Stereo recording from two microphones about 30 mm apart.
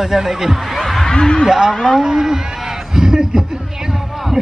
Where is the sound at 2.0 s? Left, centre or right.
Centre.